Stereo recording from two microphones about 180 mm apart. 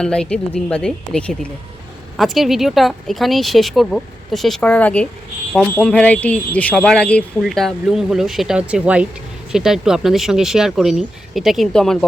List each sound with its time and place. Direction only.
0.0 s speech: 5° left (ahead or behind)